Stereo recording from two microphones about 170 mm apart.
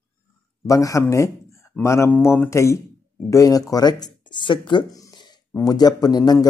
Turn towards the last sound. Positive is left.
turn(degrees=25)  # may be behind; listen again after turning